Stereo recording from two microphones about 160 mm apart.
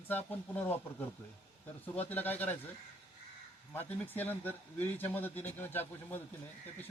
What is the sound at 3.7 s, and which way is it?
Speech, 10° left (ahead or behind).